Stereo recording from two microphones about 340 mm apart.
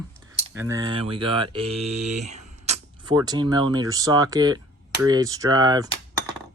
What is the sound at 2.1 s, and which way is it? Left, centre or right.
Speech, centre.